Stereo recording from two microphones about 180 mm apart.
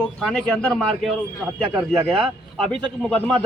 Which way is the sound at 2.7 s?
5° left (ahead or behind).